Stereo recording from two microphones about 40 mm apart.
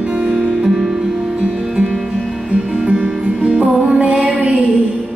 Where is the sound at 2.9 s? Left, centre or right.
Right.